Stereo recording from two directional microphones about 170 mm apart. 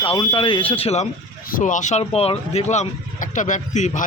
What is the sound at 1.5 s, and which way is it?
Speech, 50° left (ahead or behind).